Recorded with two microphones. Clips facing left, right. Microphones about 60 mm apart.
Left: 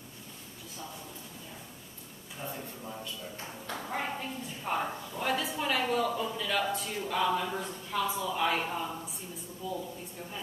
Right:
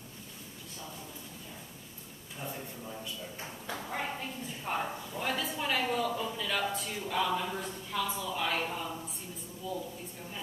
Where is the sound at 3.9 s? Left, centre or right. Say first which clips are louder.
Left 2 dB; centre.